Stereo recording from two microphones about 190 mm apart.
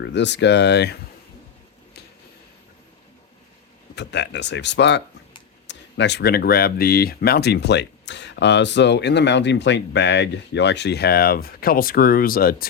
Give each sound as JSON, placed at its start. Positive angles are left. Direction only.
{"t": 0.0, "sound": "speech", "side_deg": 65}
{"t": 3.9, "sound": "speech", "side_deg": 65}